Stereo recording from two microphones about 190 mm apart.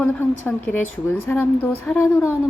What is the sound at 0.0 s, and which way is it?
A woman's voice, 10° left (ahead or behind).